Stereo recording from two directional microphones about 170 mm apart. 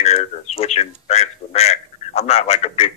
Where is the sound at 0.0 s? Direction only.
40° left (ahead or behind).